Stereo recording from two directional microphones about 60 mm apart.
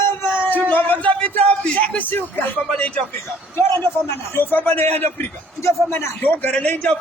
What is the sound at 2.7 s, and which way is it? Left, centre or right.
Speech, centre.